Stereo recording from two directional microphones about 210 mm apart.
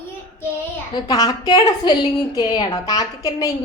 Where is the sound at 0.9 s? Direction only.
20° left (ahead or behind).